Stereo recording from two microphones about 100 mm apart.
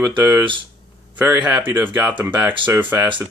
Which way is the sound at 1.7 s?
20° right (ahead or behind).